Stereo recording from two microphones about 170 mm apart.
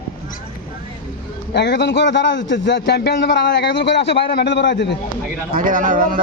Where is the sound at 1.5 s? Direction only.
85° left.